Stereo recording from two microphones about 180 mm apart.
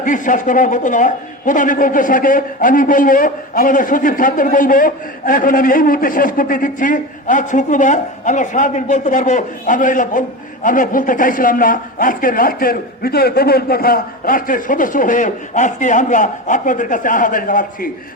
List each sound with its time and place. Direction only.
0.0 s a man's voice: 45° left (ahead or behind)